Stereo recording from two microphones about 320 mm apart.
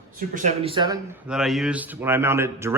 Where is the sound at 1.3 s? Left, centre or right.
Centre.